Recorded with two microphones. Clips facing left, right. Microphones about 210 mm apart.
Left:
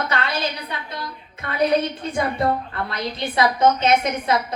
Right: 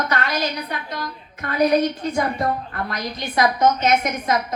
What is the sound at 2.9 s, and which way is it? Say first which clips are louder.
A woman's voice: left 1 dB; 30° left (ahead or behind).